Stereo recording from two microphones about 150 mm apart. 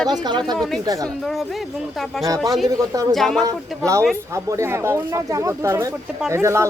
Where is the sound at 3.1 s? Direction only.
Centre (ahead or behind).